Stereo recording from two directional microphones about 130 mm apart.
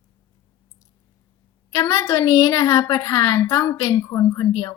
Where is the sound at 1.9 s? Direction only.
20° left (ahead or behind).